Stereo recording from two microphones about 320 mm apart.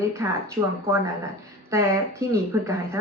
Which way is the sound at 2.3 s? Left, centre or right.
Centre.